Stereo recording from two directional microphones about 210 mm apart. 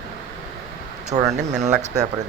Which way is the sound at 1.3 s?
35° right (ahead or behind).